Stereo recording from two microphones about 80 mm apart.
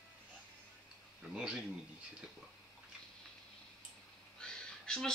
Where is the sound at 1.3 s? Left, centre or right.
Centre.